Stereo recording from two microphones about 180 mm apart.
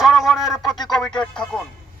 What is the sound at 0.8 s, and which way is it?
Speech, 25° left (ahead or behind).